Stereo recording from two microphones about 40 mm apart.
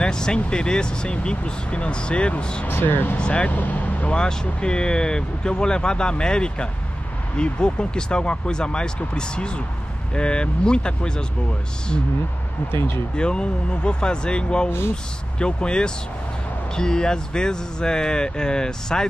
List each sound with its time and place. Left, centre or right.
0.0 s speech: centre
2.7 s speech: left
3.2 s speech: left
3.4 s speech: left
4.1 s speech: left
13.1 s speech: left